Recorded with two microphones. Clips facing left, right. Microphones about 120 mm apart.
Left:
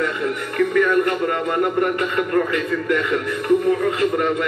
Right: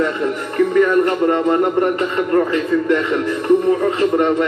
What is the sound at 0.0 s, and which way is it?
Speech, 30° right (ahead or behind).